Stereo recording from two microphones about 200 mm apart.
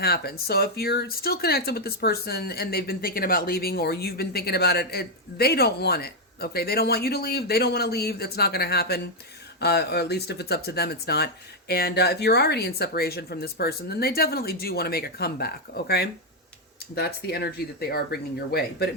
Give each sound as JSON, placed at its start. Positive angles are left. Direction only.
{"t": 0.0, "sound": "speech", "side_deg": 50}